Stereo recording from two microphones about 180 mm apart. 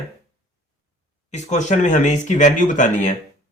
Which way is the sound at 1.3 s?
40° left (ahead or behind).